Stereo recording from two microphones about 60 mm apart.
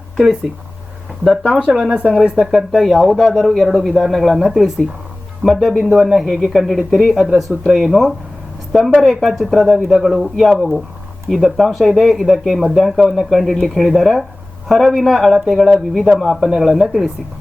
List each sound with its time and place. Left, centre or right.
1.2 s speech: centre
1.5 s speech: centre
2.5 s speech: centre